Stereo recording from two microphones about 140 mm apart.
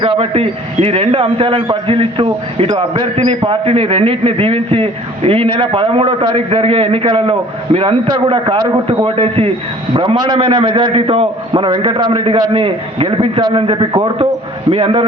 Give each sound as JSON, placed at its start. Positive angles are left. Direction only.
{"t": 0.0, "sound": "a man's voice", "side_deg": -40}
{"t": 8.0, "sound": "a man's voice", "side_deg": -30}
{"t": 8.4, "sound": "a man's voice", "side_deg": -40}